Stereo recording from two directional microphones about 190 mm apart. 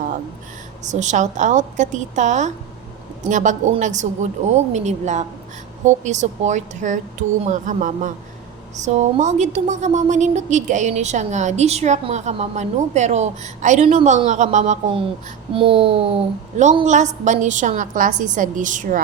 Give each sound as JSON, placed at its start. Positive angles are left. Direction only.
{"t": 0.9, "sound": "speech", "side_deg": -40}
{"t": 15.5, "sound": "speech", "side_deg": -30}
{"t": 16.8, "sound": "speech", "side_deg": -40}